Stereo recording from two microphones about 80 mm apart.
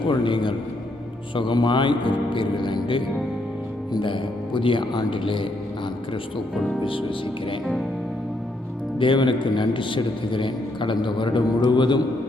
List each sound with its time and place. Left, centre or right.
0.0 s speech: left
1.4 s a man's voice: left
9.0 s a man's voice: left
11.4 s a man's voice: left